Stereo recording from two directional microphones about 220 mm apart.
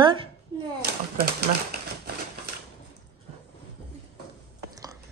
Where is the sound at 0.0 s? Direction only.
20° right (ahead or behind).